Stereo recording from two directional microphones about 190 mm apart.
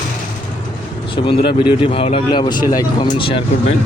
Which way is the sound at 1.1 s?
30° left (ahead or behind).